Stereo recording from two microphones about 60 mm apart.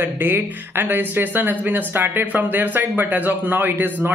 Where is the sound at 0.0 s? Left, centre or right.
Right.